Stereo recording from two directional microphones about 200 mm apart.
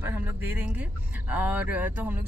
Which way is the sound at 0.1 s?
10° right (ahead or behind).